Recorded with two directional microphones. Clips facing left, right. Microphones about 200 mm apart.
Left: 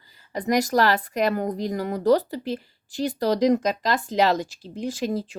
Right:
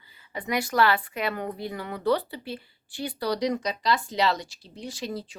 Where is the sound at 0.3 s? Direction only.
40° left (ahead or behind).